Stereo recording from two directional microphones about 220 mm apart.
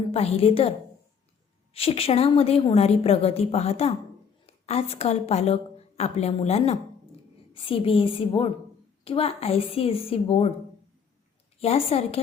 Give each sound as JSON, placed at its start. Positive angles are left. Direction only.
{"t": 0.1, "sound": "a woman's voice", "side_deg": 30}
{"t": 1.7, "sound": "a woman's voice", "side_deg": 25}
{"t": 11.6, "sound": "a woman's voice", "side_deg": 30}